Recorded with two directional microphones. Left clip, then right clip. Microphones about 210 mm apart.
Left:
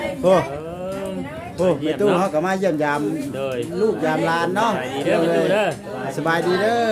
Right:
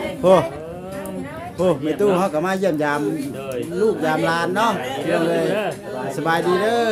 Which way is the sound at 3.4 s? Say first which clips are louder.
Left 3 dB; 55° left (ahead or behind).